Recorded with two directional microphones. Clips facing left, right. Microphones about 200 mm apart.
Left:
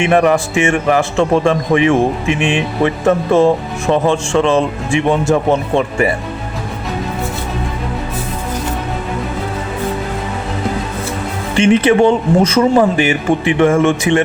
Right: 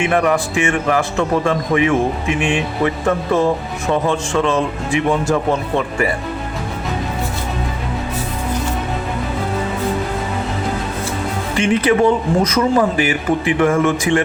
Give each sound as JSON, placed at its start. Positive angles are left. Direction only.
{"t": 0.0, "sound": "speech", "side_deg": 25}
{"t": 4.0, "sound": "speech", "side_deg": 25}
{"t": 11.5, "sound": "speech", "side_deg": 25}